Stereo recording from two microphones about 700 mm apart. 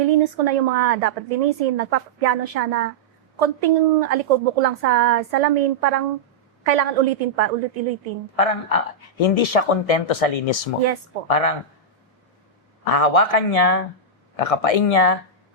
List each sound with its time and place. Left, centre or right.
0.1 s speech: right
8.4 s speech: left
12.8 s speech: left